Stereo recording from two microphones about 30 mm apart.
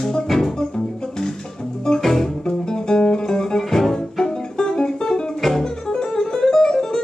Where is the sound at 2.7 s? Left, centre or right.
Left.